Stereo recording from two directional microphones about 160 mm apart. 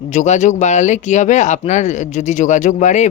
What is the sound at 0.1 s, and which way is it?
Speech, 45° left (ahead or behind).